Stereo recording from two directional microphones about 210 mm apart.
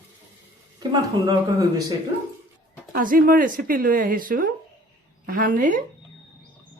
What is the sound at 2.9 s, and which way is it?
Speech, 40° right (ahead or behind).